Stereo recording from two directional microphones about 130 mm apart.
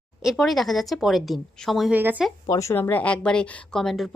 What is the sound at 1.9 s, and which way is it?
Speech, 15° right (ahead or behind).